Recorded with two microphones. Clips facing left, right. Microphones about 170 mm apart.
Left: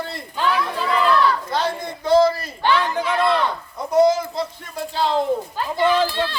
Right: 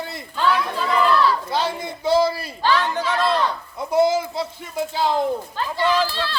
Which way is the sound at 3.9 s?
5° right (ahead or behind).